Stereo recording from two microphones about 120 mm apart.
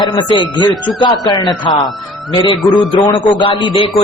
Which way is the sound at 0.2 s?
40° left (ahead or behind).